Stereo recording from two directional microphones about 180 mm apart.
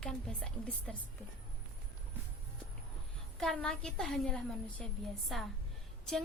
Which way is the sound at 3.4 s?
5° left (ahead or behind).